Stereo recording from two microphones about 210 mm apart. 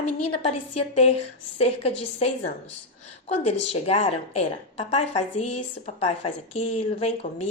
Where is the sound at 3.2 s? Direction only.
30° left (ahead or behind).